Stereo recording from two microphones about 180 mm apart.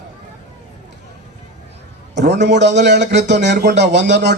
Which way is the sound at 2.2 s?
70° right (ahead or behind).